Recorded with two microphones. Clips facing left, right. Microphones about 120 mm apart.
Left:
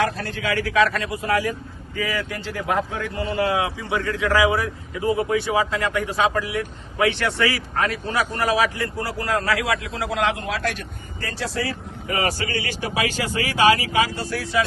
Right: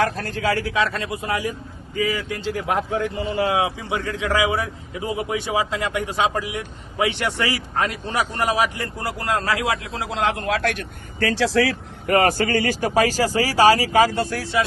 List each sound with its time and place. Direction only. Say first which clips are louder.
0.0 s speech: right 2 dB; 45° right (ahead or behind)
10.4 s a man's voice: right 3 dB; 50° right (ahead or behind)
11.2 s speech: right 8 dB; 90° right; by 14.1 s 40° right (ahead or behind)
14.2 s a man's voice: right 4 dB; 55° right (ahead or behind)